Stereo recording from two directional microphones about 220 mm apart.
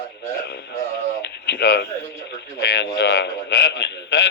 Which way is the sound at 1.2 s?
50° left (ahead or behind).